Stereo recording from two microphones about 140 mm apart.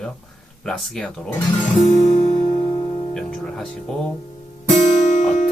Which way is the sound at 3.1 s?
5° left (ahead or behind).